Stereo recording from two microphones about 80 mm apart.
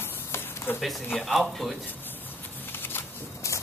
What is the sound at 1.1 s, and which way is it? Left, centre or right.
Speech, centre.